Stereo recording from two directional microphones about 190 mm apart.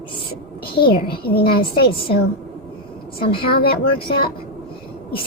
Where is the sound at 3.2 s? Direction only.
30° left (ahead or behind).